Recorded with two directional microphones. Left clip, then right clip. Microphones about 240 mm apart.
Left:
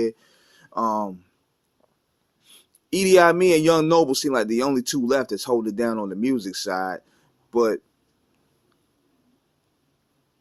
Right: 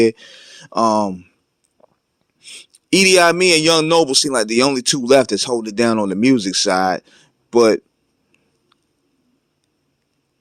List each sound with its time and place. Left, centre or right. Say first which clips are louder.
0.0 s speech: right 10 dB; right
2.4 s speech: right 15 dB; right